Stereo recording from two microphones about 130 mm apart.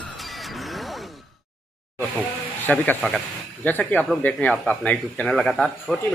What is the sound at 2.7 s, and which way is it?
A man's voice, 10° left (ahead or behind).